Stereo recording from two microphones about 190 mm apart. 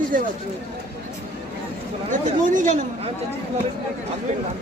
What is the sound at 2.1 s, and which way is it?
Speech, 40° right (ahead or behind).